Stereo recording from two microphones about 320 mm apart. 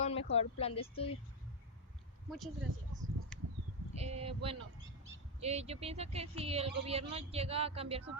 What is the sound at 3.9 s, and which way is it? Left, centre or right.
Speech, centre.